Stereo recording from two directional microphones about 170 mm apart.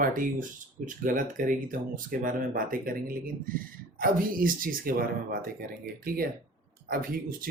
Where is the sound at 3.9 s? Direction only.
55° right (ahead or behind).